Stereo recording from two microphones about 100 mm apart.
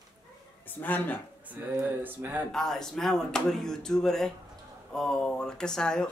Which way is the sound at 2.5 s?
5° left (ahead or behind).